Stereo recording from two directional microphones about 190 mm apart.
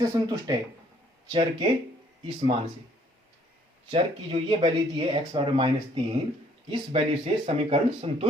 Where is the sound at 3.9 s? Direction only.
30° right (ahead or behind).